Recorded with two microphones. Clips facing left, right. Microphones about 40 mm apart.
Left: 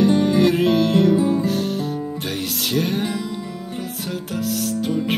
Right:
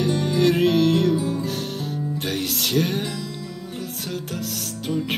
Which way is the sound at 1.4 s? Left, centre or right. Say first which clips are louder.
Left 6 dB; centre.